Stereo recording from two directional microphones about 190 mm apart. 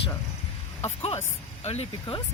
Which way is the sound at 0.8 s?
30° left (ahead or behind).